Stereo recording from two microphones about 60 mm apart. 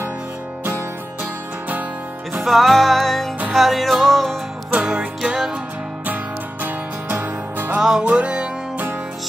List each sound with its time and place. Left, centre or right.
2.4 s music: centre
4.7 s music: centre
6.6 s music: right
8.0 s music: centre